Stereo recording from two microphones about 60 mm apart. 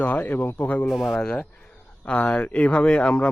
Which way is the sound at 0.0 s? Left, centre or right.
Left.